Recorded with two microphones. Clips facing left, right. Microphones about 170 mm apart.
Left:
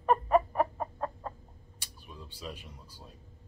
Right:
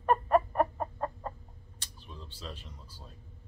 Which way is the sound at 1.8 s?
10° left (ahead or behind).